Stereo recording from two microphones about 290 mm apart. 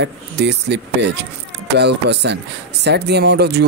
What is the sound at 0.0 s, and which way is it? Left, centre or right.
Speech, right.